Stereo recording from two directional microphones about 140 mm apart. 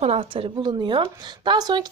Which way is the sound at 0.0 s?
45° right (ahead or behind).